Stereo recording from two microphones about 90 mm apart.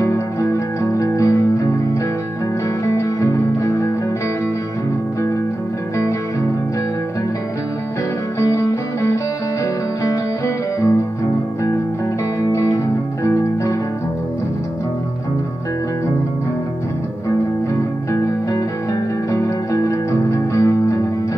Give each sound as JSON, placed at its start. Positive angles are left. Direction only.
{"t": 0.0, "sound": "music", "side_deg": 35}
{"t": 8.4, "sound": "music", "side_deg": 35}
{"t": 13.2, "sound": "music", "side_deg": 35}
{"t": 18.1, "sound": "music", "side_deg": 35}